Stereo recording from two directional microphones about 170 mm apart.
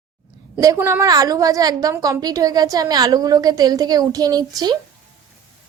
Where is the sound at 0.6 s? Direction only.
20° right (ahead or behind).